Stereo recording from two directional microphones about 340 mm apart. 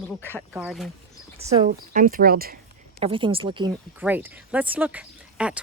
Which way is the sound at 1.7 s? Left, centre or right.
Right.